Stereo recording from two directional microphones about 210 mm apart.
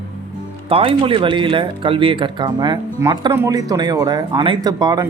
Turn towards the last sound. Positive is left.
turn(degrees=-20)  # may be behind; listen again after turning